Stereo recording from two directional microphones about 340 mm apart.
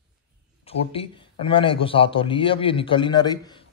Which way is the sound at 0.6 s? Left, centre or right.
Centre.